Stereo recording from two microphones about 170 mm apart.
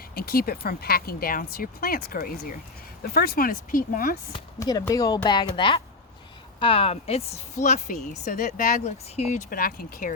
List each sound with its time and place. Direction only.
0.1 s speech: 60° left (ahead or behind)
4.3 s speech: 20° left (ahead or behind); by 10.1 s 60° left (ahead or behind)